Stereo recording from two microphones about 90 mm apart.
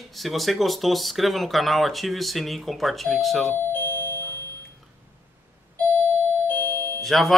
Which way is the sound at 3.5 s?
25° left (ahead or behind).